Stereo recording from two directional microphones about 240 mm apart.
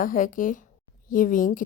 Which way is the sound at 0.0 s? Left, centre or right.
Left.